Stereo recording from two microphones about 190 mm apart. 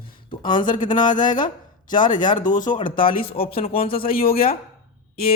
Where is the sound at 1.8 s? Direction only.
40° left (ahead or behind).